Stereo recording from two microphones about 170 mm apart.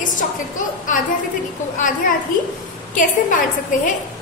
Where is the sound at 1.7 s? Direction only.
50° left (ahead or behind).